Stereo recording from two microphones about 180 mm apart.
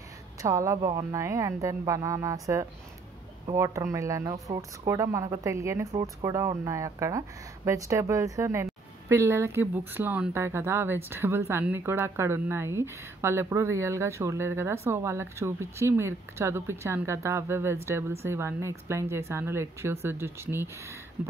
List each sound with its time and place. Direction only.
0.4 s speech: 15° right (ahead or behind)